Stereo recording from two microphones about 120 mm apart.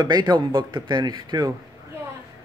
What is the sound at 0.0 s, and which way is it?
Speech, 40° right (ahead or behind).